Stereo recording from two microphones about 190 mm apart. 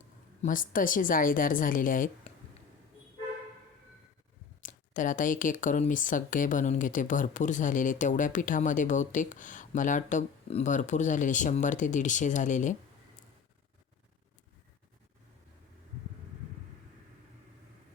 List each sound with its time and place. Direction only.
0.4 s speech: 45° left (ahead or behind)
2.3 s a sound: 35° left (ahead or behind)
4.6 s speech: 45° left (ahead or behind)